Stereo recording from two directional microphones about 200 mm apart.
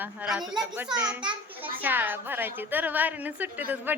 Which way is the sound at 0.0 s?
5° right (ahead or behind).